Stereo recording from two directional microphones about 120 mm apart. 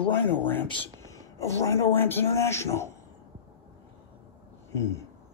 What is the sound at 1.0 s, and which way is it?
Speech, 25° left (ahead or behind).